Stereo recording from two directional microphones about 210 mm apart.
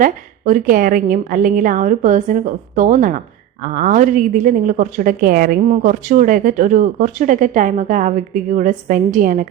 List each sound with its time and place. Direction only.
0.0 s a woman's voice: 40° right (ahead or behind)